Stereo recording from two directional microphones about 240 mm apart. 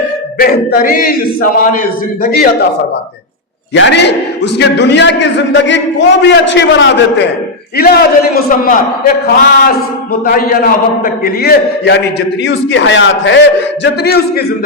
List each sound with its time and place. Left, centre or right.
0.3 s a man's voice: left
3.8 s a man's voice: left